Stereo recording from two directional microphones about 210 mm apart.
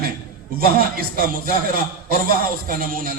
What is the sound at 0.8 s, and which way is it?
A man's voice, 45° right (ahead or behind).